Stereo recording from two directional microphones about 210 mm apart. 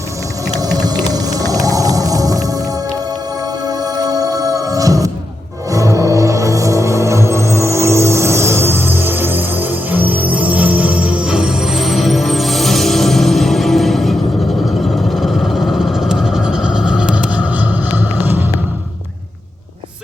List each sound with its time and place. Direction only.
0.6 s whale vocalization: 20° right (ahead or behind)
3.7 s music: 20° right (ahead or behind); by 14.2 s centre (ahead or behind)
15.1 s a sound: centre (ahead or behind)